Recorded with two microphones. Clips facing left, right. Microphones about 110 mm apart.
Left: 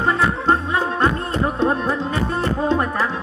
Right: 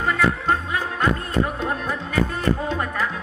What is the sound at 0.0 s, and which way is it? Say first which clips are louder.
Music: left 2 dB; 30° left (ahead or behind).